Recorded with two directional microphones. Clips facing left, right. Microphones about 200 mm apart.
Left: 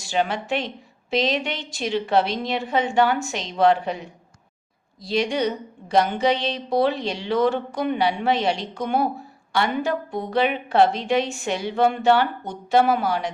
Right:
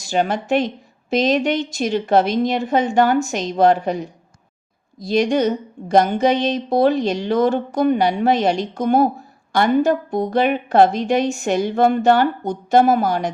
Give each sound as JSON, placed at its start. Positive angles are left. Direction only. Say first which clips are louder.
{"t": 0.0, "sound": "speech", "louder": "right 4 dB", "side_deg": -45}